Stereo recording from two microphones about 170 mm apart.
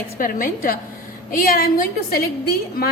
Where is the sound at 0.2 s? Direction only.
55° left (ahead or behind).